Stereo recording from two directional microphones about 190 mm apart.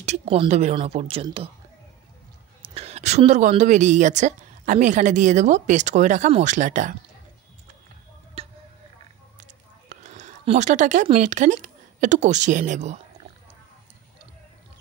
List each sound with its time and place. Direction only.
0.0 s speech: 35° right (ahead or behind)
2.6 s speech: 30° right (ahead or behind)
8.4 s tick-tock: 30° right (ahead or behind)
9.4 s speech: 40° right (ahead or behind)